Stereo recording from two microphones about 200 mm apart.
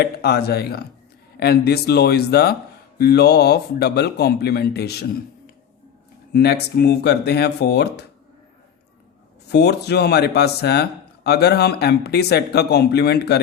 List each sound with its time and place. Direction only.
0.0 s speech: 55° left (ahead or behind)
6.3 s speech: 55° left (ahead or behind)
9.5 s speech: 55° left (ahead or behind)